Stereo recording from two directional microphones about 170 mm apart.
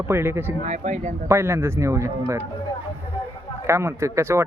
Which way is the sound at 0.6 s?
40° right (ahead or behind).